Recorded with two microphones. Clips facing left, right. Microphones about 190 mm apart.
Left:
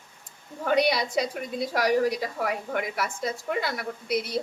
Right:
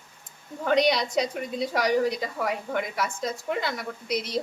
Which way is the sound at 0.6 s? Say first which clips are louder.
Right 1 dB; 5° left (ahead or behind).